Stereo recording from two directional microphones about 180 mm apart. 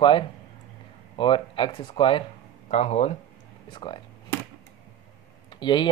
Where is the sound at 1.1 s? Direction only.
30° left (ahead or behind).